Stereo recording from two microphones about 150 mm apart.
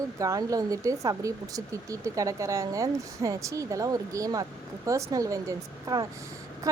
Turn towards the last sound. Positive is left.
turn(degrees=-25)  # may be behind; listen again after turning